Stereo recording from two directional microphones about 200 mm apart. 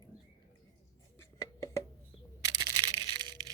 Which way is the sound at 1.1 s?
15° left (ahead or behind).